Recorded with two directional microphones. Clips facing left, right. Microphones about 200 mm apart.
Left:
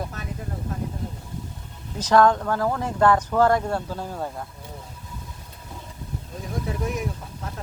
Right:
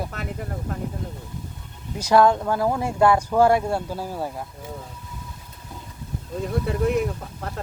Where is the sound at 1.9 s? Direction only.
10° right (ahead or behind).